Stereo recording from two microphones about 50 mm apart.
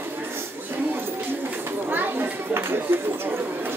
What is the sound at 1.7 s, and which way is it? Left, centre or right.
Chatter, right.